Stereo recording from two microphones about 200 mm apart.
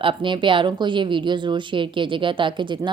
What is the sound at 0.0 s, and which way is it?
A woman's voice, 25° right (ahead or behind).